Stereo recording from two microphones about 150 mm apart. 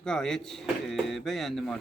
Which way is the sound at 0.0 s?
5° left (ahead or behind).